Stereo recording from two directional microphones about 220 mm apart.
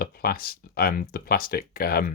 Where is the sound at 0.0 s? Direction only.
40° left (ahead or behind).